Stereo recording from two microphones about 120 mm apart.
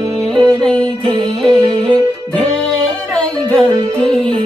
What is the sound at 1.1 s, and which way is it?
Music, 45° right (ahead or behind).